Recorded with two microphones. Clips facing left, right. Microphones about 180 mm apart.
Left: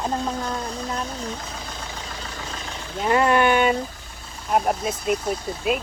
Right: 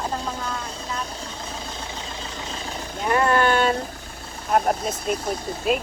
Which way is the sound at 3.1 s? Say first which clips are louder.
Left 1 dB; 20° left (ahead or behind).